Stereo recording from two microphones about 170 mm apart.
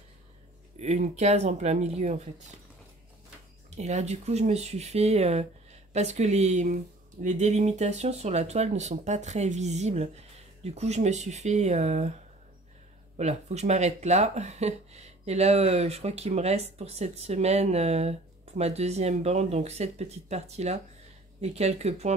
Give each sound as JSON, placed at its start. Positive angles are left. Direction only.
{"t": 0.7, "sound": "speech", "side_deg": -40}
{"t": 3.7, "sound": "speech", "side_deg": -40}
{"t": 13.2, "sound": "speech", "side_deg": -40}